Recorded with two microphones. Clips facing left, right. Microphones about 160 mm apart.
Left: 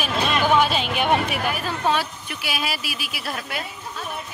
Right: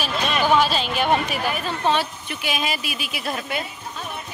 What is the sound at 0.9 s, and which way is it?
Speech, 15° left (ahead or behind).